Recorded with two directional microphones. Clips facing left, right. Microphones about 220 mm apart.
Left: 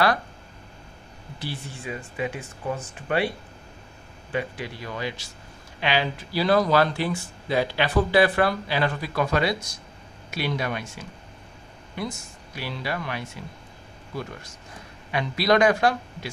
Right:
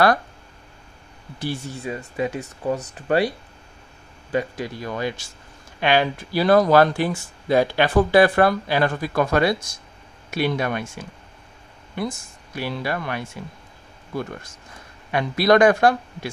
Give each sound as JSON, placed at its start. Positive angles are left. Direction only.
{"t": 1.4, "sound": "speech", "side_deg": -45}
{"t": 12.5, "sound": "speech", "side_deg": -50}
{"t": 15.0, "sound": "speech", "side_deg": -55}